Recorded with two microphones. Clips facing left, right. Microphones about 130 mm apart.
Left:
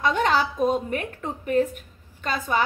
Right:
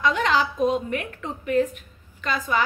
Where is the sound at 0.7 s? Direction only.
40° left (ahead or behind).